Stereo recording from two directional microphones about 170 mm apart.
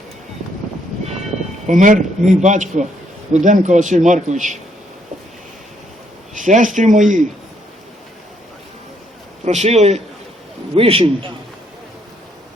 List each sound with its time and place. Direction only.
1.6 s a man's voice: 50° right (ahead or behind)
6.3 s a man's voice: 45° right (ahead or behind)
9.4 s a man's voice: 40° right (ahead or behind)